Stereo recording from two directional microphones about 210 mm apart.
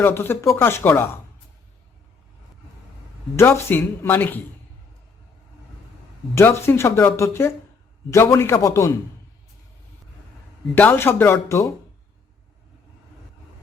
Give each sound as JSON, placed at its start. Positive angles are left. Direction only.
{"t": 0.0, "sound": "speech", "side_deg": 10}
{"t": 3.3, "sound": "speech", "side_deg": 10}
{"t": 6.3, "sound": "speech", "side_deg": 10}
{"t": 10.8, "sound": "speech", "side_deg": 10}